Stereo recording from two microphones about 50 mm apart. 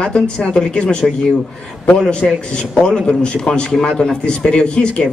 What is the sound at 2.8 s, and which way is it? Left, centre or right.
A woman's voice, centre.